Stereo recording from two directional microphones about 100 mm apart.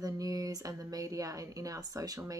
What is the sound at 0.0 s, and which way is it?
Speech, 35° right (ahead or behind).